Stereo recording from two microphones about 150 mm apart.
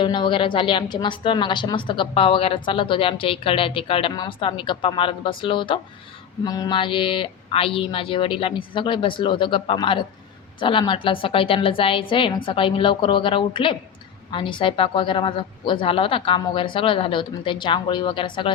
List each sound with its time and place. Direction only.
0.0 s a woman's voice: 30° left (ahead or behind)